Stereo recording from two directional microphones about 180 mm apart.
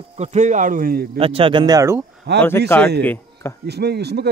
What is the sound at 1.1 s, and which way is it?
Speech, 30° right (ahead or behind).